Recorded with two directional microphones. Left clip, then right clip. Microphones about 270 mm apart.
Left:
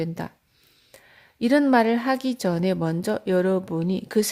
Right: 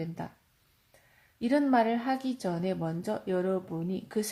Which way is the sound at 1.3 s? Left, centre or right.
Left.